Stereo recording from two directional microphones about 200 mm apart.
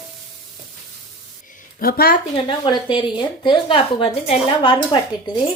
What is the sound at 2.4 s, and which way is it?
A woman's voice, 25° left (ahead or behind).